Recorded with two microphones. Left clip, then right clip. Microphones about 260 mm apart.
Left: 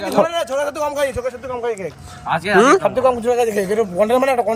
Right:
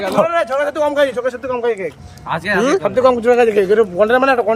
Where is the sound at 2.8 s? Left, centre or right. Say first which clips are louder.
Right 3 dB; left.